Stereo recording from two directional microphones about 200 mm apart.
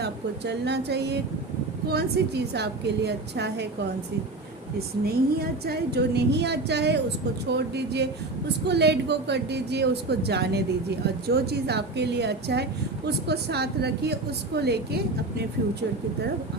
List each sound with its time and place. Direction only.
0.0 s a woman's voice: 55° right (ahead or behind)
5.0 s a woman's voice: 50° right (ahead or behind)